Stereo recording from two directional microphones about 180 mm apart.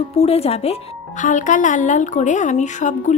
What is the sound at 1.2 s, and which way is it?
Speech, 45° left (ahead or behind).